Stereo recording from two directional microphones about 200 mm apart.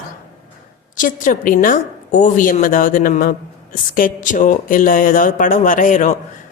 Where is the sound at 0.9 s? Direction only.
40° left (ahead or behind).